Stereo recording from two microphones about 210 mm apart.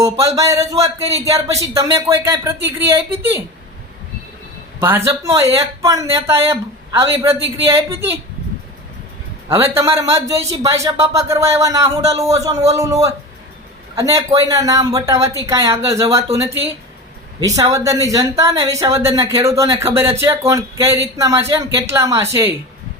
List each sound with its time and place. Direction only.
0.0 s speech: 15° right (ahead or behind)
4.8 s speech: 10° right (ahead or behind)
9.5 s speech: 10° right (ahead or behind)